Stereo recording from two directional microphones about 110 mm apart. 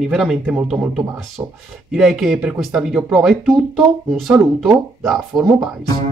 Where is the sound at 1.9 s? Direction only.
5° right (ahead or behind).